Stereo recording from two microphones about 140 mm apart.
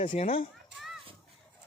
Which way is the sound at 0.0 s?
65° left (ahead or behind).